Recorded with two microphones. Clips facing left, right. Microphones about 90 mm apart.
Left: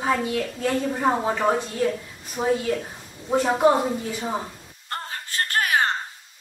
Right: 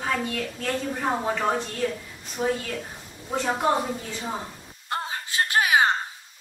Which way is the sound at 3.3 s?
10° left (ahead or behind).